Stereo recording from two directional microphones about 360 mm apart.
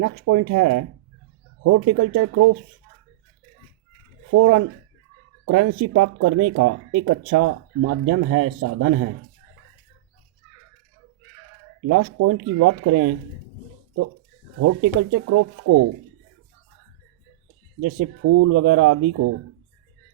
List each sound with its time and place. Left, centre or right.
0.0 s speech: right
4.3 s speech: right
11.9 s speech: right
14.6 s speech: right
17.8 s speech: right